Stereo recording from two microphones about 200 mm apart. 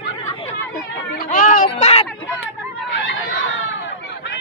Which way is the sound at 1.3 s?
40° left (ahead or behind).